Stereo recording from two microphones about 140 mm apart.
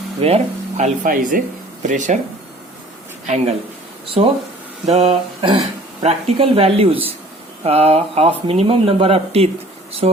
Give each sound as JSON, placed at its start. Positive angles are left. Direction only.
{"t": 0.2, "sound": "speech", "side_deg": -45}
{"t": 3.2, "sound": "speech", "side_deg": -55}
{"t": 4.0, "sound": "speech", "side_deg": -45}